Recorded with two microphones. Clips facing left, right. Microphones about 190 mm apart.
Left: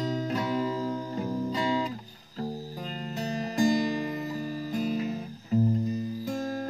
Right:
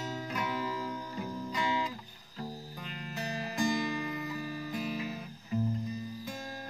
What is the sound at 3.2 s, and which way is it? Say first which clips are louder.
Music: left 7 dB; 35° left (ahead or behind).